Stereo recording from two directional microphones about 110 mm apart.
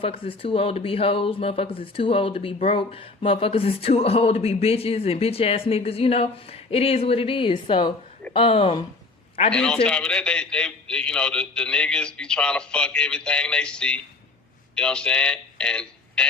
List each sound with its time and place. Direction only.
0.0 s speech: 55° left (ahead or behind)
9.5 s a man's voice: 10° left (ahead or behind)